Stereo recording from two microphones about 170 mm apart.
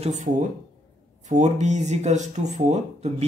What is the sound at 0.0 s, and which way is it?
Speech, 45° right (ahead or behind).